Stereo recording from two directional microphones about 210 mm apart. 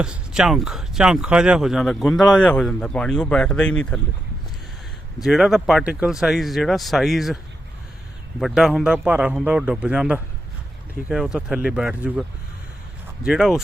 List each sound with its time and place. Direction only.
0.0 s speech: 5° right (ahead or behind)
5.2 s speech: centre (ahead or behind)
8.4 s speech: centre (ahead or behind)
13.2 s speech: 5° right (ahead or behind)